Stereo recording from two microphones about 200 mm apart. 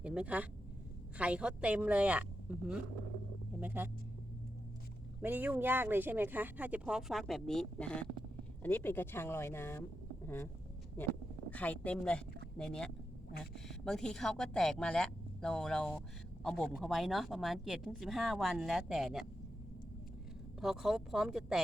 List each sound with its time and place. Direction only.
0.0 s a woman's voice: 5° right (ahead or behind)
5.2 s speech: 10° right (ahead or behind); by 10.5 s 10° left (ahead or behind)
11.5 s a woman's voice: 5° left (ahead or behind)
20.6 s a woman's voice: centre (ahead or behind)